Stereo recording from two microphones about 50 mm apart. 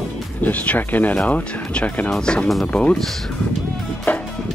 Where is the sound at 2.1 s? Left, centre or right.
Centre.